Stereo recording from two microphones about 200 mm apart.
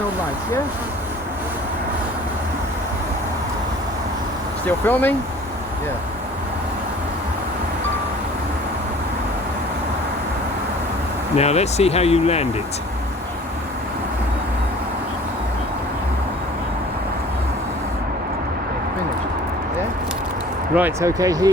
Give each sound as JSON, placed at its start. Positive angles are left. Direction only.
{"t": 4.6, "sound": "speech", "side_deg": 10}
{"t": 11.3, "sound": "speech", "side_deg": 35}
{"t": 20.7, "sound": "speech", "side_deg": -10}